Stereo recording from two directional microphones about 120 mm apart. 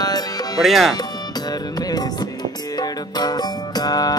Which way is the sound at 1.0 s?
35° left (ahead or behind).